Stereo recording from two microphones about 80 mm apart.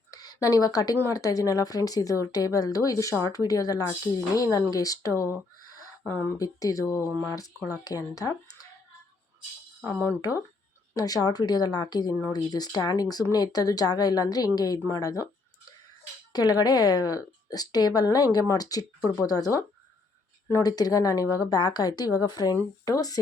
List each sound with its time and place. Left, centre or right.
0.1 s a sound: left
0.4 s speech: left
6.3 s speech: left
10.2 s a woman's voice: left
16.3 s speech: left
20.6 s speech: left